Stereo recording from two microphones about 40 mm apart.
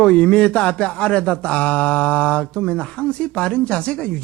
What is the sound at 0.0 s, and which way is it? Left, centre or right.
Speech, left.